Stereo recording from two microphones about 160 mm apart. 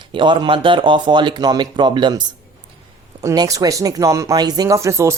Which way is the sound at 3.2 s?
25° right (ahead or behind).